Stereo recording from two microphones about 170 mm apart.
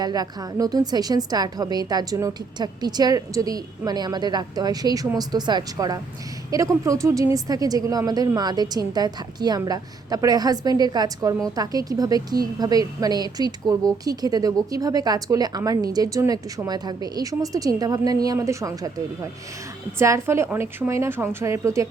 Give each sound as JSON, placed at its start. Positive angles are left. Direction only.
{"t": 0.0, "sound": "a woman's voice", "side_deg": -25}